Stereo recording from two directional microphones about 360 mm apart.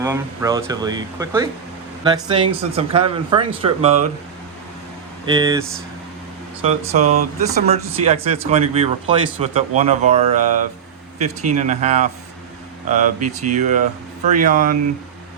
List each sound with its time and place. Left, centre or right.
0.0 s speech: centre
5.2 s speech: centre
6.7 s speech: centre